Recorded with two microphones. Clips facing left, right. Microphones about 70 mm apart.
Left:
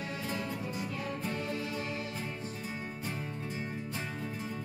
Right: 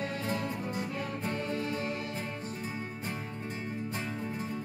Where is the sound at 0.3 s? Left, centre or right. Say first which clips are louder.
Right 3 dB; right.